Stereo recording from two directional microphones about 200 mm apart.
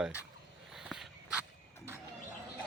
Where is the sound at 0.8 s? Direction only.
Centre (ahead or behind).